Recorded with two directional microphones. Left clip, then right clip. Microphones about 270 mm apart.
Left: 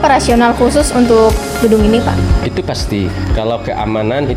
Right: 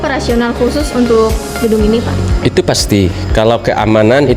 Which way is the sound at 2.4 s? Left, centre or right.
Right.